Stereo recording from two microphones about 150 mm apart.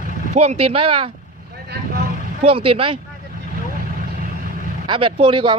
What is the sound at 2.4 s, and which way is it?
Speech, 40° right (ahead or behind).